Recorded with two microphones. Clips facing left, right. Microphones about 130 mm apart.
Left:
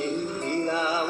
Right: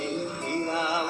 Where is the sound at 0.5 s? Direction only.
20° left (ahead or behind).